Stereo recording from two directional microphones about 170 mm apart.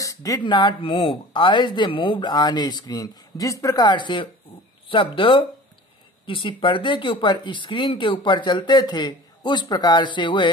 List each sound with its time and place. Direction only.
0.0 s speech: 20° left (ahead or behind)